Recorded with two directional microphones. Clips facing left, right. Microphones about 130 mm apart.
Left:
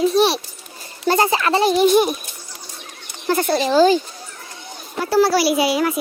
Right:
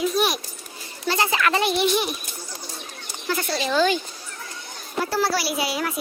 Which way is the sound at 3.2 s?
45° left (ahead or behind).